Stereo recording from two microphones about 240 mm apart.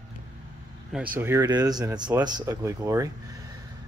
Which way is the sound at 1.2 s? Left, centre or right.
Centre.